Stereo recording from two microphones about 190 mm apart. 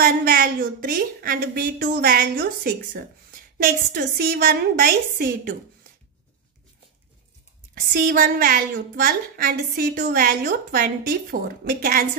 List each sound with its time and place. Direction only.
0.0 s a woman's voice: 50° right (ahead or behind)
7.9 s a woman's voice: 50° right (ahead or behind)